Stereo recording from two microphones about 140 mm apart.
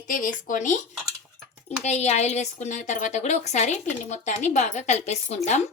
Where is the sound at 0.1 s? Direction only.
75° left (ahead or behind).